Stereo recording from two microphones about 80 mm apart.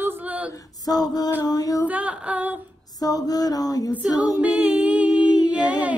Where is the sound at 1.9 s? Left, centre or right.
Centre.